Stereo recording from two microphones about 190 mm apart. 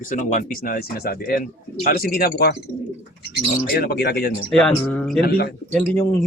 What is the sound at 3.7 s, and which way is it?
Speech, 55° left (ahead or behind).